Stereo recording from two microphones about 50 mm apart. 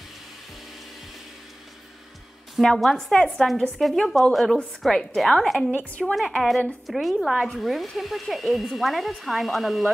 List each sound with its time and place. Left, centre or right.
2.6 s speech: centre
5.9 s a woman's voice: left
6.1 s speech: centre